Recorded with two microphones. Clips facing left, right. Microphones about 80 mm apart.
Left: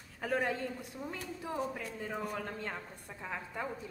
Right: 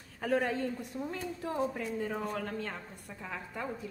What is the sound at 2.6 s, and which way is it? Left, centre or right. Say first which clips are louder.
A woman's voice: right 1 dB; centre.